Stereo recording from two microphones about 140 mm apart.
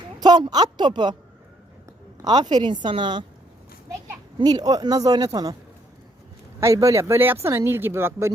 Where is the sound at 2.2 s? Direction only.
30° right (ahead or behind).